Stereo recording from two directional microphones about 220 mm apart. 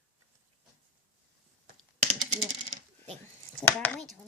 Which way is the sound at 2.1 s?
30° right (ahead or behind).